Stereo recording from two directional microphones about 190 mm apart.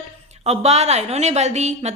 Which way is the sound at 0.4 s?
35° right (ahead or behind).